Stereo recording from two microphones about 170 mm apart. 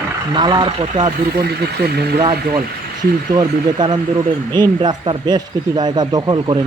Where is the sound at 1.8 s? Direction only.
70° right (ahead or behind).